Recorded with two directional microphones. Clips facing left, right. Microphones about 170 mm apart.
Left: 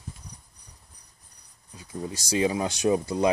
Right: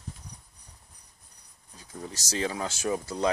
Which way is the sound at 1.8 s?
10° left (ahead or behind).